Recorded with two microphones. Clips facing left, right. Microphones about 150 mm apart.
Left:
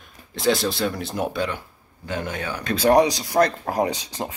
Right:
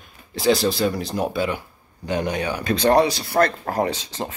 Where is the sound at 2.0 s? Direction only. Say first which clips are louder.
Right 5 dB; 15° right (ahead or behind).